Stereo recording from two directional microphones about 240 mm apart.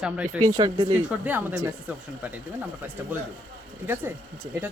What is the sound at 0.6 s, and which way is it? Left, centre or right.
Speech, centre.